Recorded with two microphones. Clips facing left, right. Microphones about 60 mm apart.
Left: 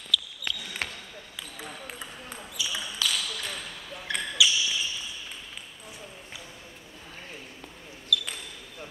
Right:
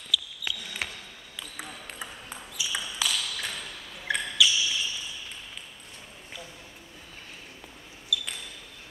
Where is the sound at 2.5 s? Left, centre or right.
Centre.